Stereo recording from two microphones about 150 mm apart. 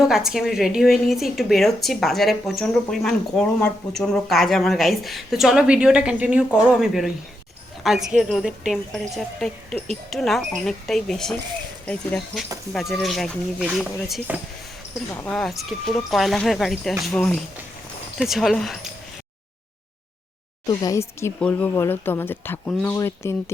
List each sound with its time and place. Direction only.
0.1 s speech: centre (ahead or behind)
15.1 s speech: 10° left (ahead or behind)
17.1 s speech: 10° left (ahead or behind)
18.2 s speech: centre (ahead or behind)
20.7 s speech: 20° left (ahead or behind)